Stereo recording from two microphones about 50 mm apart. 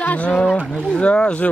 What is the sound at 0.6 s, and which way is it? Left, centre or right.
Speech, centre.